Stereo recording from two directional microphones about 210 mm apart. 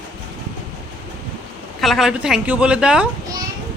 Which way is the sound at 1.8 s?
Centre (ahead or behind).